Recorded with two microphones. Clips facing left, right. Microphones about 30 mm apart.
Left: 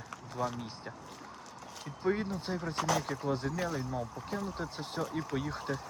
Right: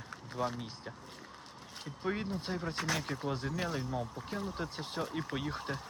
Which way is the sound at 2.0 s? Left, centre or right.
Centre.